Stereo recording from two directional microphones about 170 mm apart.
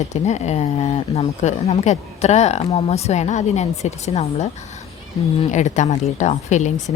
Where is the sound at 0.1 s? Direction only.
40° left (ahead or behind).